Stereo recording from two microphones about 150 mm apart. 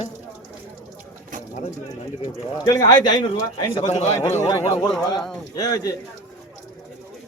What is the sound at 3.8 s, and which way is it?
Speech, 50° left (ahead or behind).